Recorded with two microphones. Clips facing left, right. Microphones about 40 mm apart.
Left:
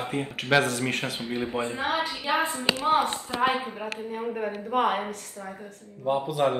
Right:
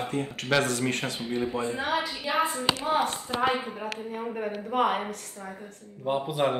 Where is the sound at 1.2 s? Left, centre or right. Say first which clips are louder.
Right 1 dB; left.